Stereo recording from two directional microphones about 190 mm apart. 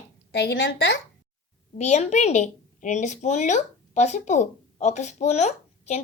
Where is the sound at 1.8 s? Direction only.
35° left (ahead or behind).